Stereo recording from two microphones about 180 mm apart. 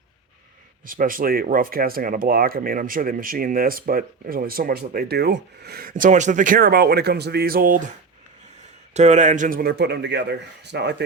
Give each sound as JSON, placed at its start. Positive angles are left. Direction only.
{"t": 0.9, "sound": "speech", "side_deg": -50}
{"t": 8.9, "sound": "a man's voice", "side_deg": -40}